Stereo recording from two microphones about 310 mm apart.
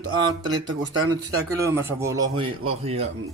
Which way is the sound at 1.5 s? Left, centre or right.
Centre.